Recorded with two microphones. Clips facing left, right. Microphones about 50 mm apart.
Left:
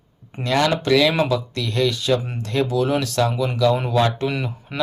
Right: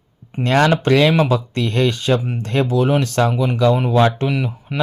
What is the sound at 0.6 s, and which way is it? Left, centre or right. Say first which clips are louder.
Speech: right 2 dB; right.